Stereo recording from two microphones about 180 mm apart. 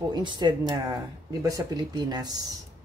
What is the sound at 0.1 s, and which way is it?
Speech, 25° right (ahead or behind).